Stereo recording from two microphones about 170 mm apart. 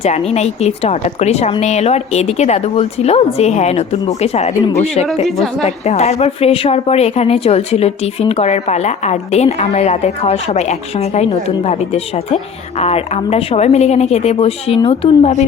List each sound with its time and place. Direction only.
0.0 s speech: 40° left (ahead or behind)
5.2 s a woman's voice: centre (ahead or behind)
5.6 s speech: 40° left (ahead or behind)